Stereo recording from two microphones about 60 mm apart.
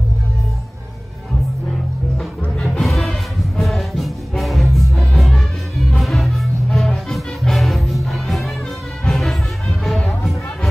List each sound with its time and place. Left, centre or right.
2.4 s music: centre
2.8 s music: centre